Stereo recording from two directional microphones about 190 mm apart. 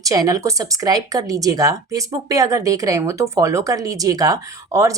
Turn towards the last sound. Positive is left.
turn(degrees=-15)  # may be behind; listen again after turning